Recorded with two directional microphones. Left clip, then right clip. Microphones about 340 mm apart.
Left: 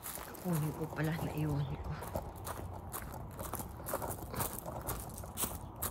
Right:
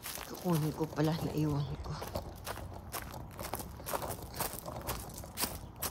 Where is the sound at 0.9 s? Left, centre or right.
Centre.